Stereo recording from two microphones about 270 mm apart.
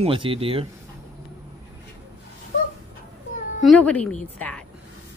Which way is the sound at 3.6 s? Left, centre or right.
Centre.